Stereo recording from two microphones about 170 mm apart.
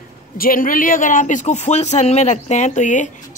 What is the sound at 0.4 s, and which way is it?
A man's voice, 55° left (ahead or behind).